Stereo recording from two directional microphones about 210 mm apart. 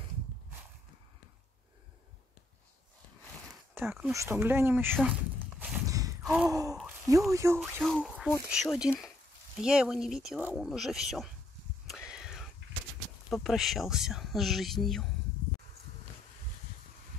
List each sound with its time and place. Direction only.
3.7 s speech: 10° right (ahead or behind)
4.9 s a sound: 5° right (ahead or behind)
6.2 s gasp: 5° right (ahead or behind)
6.5 s speech: 15° right (ahead or behind)
7.8 s speech: centre (ahead or behind)
12.1 s whispering: centre (ahead or behind)
13.3 s speech: centre (ahead or behind)